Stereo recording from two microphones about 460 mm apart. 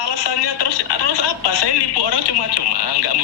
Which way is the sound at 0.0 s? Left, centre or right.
Left.